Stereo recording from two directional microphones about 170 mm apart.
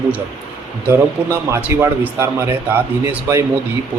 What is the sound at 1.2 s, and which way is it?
A man's voice, 10° right (ahead or behind).